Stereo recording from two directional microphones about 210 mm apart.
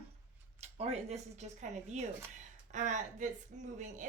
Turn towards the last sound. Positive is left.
turn(degrees=-35)  # may be behind; listen again after turning